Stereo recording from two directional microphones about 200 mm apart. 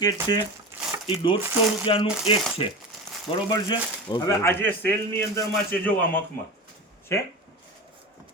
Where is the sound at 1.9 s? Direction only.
25° left (ahead or behind); by 6.2 s 10° left (ahead or behind).